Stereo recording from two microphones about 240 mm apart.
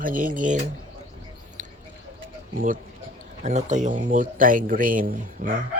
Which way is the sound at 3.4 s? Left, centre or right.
Right.